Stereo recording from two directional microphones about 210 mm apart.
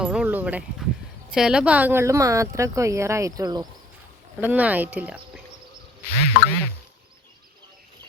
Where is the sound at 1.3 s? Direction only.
5° right (ahead or behind); by 3.7 s 20° right (ahead or behind).